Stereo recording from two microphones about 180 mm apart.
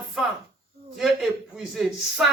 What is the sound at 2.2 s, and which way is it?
Speech, 5° right (ahead or behind).